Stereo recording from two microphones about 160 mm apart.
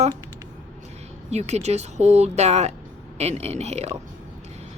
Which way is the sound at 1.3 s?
40° right (ahead or behind).